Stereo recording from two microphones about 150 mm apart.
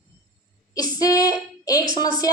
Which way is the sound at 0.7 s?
25° left (ahead or behind).